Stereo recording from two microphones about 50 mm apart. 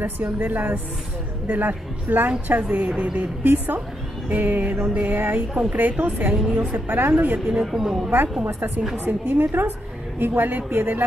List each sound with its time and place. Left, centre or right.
0.0 s a woman's voice: right
3.4 s a woman's voice: right
5.5 s a woman's voice: right
6.3 s a woman's voice: centre
6.7 s a woman's voice: right
7.6 s a woman's voice: centre
8.5 s a woman's voice: right